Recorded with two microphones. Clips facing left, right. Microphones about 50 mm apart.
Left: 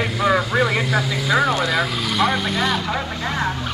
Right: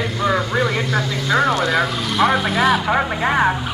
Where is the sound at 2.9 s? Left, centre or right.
Right.